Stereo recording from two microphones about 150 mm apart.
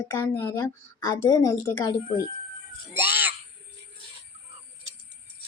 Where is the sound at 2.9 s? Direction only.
15° right (ahead or behind).